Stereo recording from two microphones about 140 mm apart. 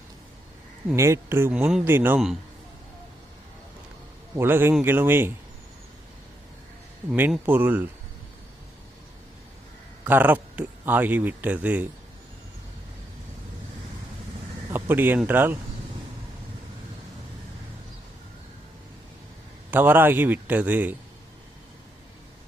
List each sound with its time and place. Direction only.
0.9 s speech: 20° right (ahead or behind)
4.4 s speech: 15° right (ahead or behind)
7.2 s speech: 15° right (ahead or behind)
10.1 s speech: 15° right (ahead or behind)
14.7 s a man's voice: 15° right (ahead or behind)
19.7 s speech: 15° right (ahead or behind)